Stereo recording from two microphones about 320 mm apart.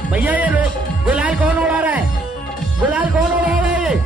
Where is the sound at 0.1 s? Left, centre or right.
Centre.